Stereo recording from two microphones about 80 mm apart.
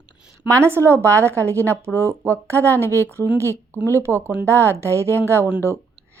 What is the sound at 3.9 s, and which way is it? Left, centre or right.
A woman's voice, right.